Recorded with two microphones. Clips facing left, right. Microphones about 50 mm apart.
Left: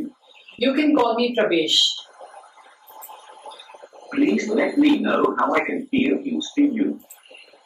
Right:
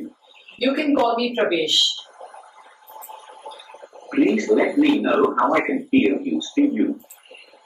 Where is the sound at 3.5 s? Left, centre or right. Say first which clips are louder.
Right 2 dB; right.